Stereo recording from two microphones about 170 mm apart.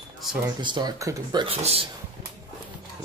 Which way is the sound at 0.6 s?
25° right (ahead or behind).